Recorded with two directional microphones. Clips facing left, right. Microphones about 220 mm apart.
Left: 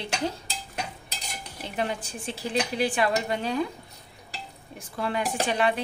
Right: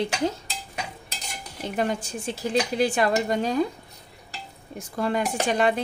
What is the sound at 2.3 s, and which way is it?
Speech, 45° right (ahead or behind).